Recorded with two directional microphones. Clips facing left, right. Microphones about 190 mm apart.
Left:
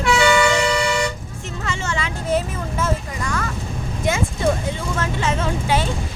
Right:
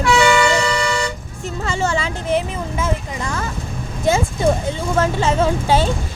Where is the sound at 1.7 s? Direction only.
35° right (ahead or behind).